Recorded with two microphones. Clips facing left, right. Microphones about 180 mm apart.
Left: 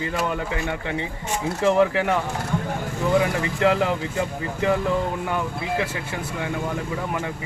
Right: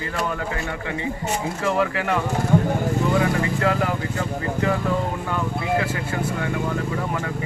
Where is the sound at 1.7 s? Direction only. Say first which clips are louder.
Left 4 dB; 20° left (ahead or behind).